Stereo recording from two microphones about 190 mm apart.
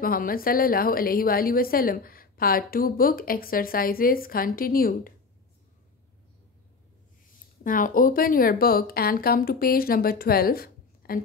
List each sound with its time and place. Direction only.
0.0 s a woman's voice: 50° left (ahead or behind)
7.6 s a woman's voice: 45° left (ahead or behind)